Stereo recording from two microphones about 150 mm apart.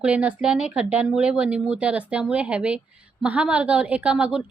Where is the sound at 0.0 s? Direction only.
10° right (ahead or behind).